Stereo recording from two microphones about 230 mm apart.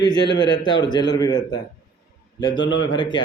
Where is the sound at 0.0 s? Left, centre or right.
Centre.